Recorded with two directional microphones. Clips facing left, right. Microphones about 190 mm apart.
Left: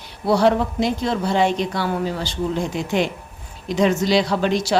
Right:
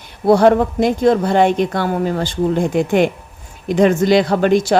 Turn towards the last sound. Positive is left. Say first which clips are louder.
# right 6 dB
turn(degrees=-50)  # may be behind; listen again after turning